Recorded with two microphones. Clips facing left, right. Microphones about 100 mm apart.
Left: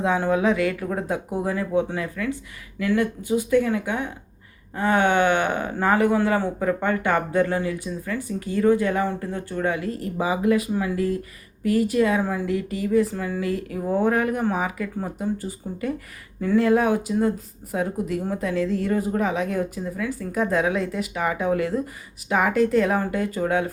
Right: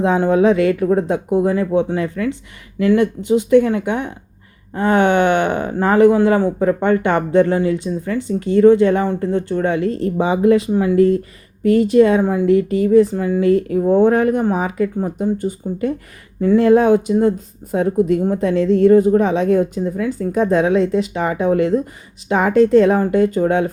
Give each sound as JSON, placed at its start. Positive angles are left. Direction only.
{"t": 0.0, "sound": "speech", "side_deg": -25}